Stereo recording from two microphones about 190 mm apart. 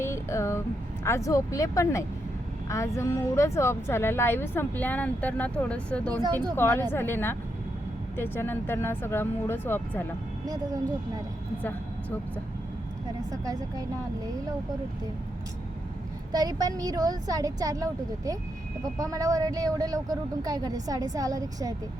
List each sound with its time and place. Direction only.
0.0 s a sound: 15° left (ahead or behind)
1.0 s speech: 15° left (ahead or behind)
10.4 s a woman's voice: 20° right (ahead or behind)
13.3 s a woman's voice: 20° right (ahead or behind)
16.3 s a woman's voice: 20° right (ahead or behind)